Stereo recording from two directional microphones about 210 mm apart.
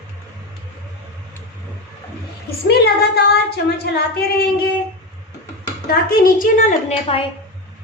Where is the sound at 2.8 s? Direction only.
50° left (ahead or behind).